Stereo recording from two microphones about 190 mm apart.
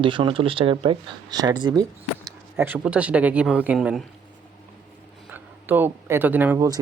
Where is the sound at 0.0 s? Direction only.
25° right (ahead or behind); by 4.0 s 5° right (ahead or behind).